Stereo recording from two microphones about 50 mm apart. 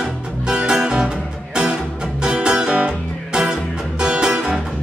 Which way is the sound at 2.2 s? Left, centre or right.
Centre.